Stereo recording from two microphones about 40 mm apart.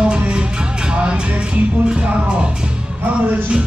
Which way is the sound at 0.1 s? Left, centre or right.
Right.